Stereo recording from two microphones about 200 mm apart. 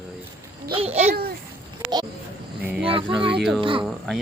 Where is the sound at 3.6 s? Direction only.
25° right (ahead or behind).